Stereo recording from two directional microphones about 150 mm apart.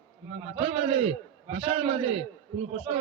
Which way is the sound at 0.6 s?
40° right (ahead or behind).